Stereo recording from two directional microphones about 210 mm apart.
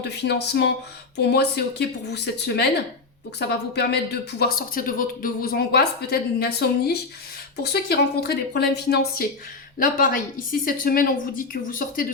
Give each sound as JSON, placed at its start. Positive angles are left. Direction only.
{"t": 0.0, "sound": "speech", "side_deg": 50}